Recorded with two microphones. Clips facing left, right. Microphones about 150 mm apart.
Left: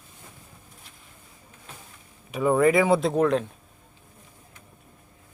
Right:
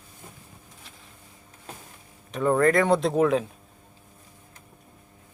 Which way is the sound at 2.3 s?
5° left (ahead or behind).